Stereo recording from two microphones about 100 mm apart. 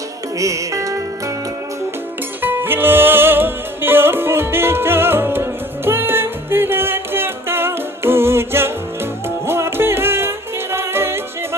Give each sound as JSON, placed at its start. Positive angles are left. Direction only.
{"t": 0.3, "sound": "music", "side_deg": -35}
{"t": 2.4, "sound": "music", "side_deg": -20}